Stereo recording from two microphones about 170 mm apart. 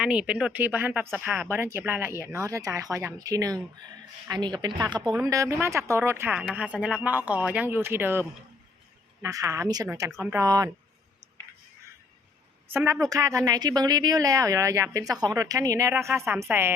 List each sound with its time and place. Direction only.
0.0 s a woman's voice: 5° right (ahead or behind)
12.7 s a woman's voice: 15° right (ahead or behind)